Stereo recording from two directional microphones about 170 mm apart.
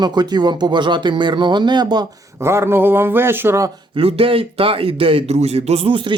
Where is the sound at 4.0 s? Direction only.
35° right (ahead or behind).